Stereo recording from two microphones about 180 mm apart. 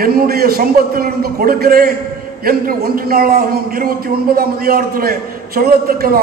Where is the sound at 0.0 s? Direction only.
55° right (ahead or behind).